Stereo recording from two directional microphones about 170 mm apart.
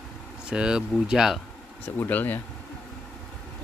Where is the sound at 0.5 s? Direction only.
5° right (ahead or behind).